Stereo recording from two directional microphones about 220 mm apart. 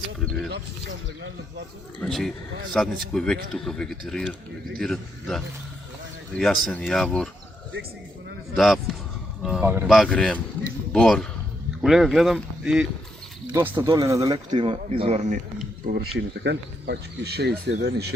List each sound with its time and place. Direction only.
0.5 s speech: 55° right (ahead or behind)
2.0 s speech: centre (ahead or behind)
8.5 s speech: centre (ahead or behind); by 15.4 s 30° right (ahead or behind)
16.1 s speech: 50° right (ahead or behind)